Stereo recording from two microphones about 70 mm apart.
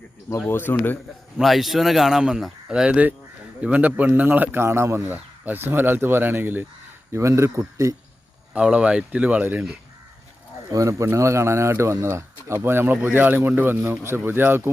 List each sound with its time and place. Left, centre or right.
0.3 s speech: left
1.4 s a man's voice: centre; by 6.7 s right
7.1 s speech: right
8.5 s speech: centre
10.7 s speech: right
11.0 s speech: right